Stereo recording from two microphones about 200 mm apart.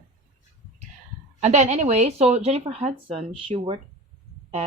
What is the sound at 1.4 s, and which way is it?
Speech, 35° right (ahead or behind).